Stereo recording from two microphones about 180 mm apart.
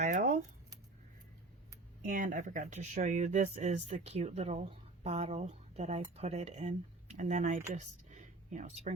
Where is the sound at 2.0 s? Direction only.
45° right (ahead or behind).